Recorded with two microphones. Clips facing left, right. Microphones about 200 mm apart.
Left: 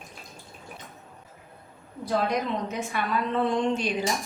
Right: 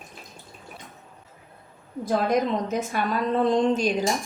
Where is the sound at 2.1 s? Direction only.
45° right (ahead or behind).